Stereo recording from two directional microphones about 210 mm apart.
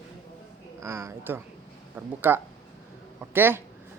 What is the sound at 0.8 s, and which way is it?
A man's voice, 15° right (ahead or behind).